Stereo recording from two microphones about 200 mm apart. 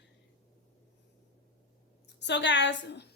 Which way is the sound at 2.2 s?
60° left (ahead or behind).